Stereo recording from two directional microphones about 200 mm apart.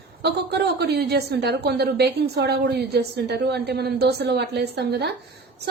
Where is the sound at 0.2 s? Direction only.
55° right (ahead or behind).